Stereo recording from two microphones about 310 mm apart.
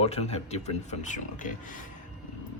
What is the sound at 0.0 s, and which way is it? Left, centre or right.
Speech, centre.